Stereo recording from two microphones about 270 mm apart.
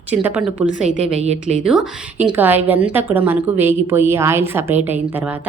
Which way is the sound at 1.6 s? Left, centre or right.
Centre.